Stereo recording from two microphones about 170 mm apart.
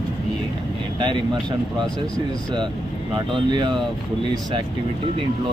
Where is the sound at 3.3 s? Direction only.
30° right (ahead or behind).